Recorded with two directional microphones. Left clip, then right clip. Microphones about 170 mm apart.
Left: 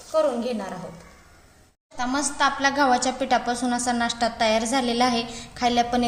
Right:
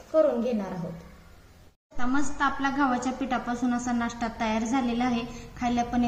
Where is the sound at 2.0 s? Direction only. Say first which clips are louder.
Left 4 dB; 50° left (ahead or behind).